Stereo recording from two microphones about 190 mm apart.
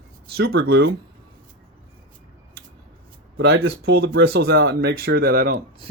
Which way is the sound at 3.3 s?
60° right (ahead or behind).